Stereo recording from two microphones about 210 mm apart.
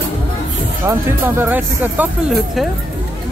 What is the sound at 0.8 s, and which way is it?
Speech, 10° right (ahead or behind).